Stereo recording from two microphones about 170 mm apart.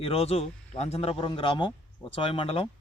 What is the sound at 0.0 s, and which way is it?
A man's voice, 35° left (ahead or behind).